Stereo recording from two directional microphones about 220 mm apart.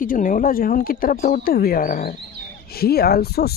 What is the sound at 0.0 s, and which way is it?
Speech, 40° left (ahead or behind).